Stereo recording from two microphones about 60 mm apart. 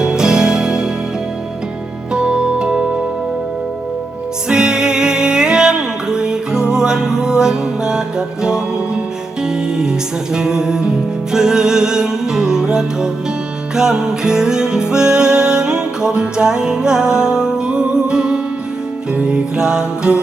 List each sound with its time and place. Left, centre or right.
0.0 s music: centre
2.1 s music: centre
4.4 s music: centre